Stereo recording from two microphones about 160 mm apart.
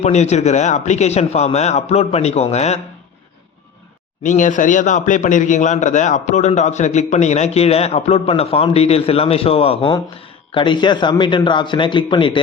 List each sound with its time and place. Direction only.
0.0 s a man's voice: 45° left (ahead or behind)
4.2 s speech: 55° left (ahead or behind); by 12.4 s 30° left (ahead or behind)